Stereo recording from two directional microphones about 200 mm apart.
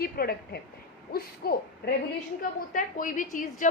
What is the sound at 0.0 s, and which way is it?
A woman's voice, 50° left (ahead or behind).